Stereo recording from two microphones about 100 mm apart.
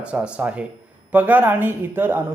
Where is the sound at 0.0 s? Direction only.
10° right (ahead or behind).